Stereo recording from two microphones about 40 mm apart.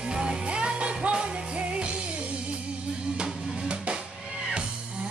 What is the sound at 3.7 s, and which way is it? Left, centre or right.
Music, right.